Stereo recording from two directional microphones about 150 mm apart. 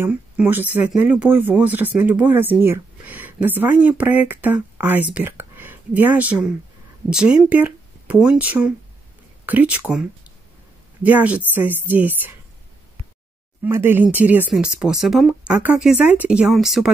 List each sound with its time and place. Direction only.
0.0 s speech: 15° right (ahead or behind)
13.6 s speech: 15° right (ahead or behind)